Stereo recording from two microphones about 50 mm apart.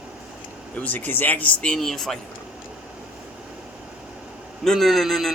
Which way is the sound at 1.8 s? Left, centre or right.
Centre.